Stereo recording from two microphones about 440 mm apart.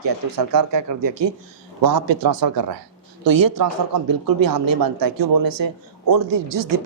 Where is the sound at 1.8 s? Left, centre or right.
Right.